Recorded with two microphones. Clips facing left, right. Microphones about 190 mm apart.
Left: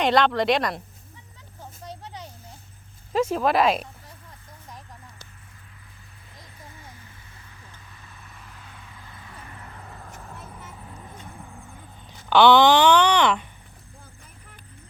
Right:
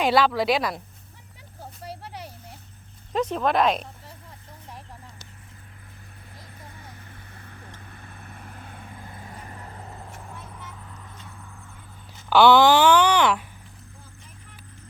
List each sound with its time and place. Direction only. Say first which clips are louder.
0.0 s speech: even; 5° right (ahead or behind)
1.8 s vehicle: right 1 dB; 10° right (ahead or behind)
3.1 s speech: left 2 dB; 5° left (ahead or behind)
7.4 s vehicle: right 6 dB; 55° right (ahead or behind); by 10.0 s 30° right (ahead or behind)
10.9 s vehicle: left 3 dB; 30° left (ahead or behind)
12.1 s speech: even; 5° right (ahead or behind)